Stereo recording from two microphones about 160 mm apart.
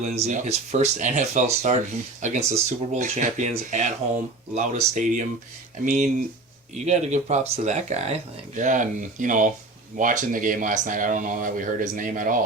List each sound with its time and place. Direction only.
0.0 s speech: 45° right (ahead or behind)